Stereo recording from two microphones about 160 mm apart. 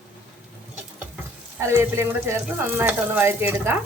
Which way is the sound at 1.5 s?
15° right (ahead or behind).